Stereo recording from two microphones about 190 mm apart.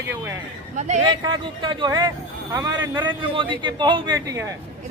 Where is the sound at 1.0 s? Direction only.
25° right (ahead or behind).